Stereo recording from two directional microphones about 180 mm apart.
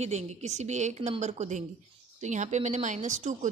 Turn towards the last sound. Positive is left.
turn(degrees=-45)  # may be behind; listen again after turning